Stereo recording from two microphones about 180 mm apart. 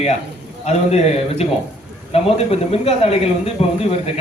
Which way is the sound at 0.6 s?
35° left (ahead or behind).